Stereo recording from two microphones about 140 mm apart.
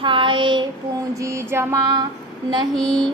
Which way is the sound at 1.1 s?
20° right (ahead or behind).